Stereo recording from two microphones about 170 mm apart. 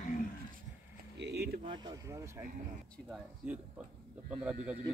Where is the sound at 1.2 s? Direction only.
80° right.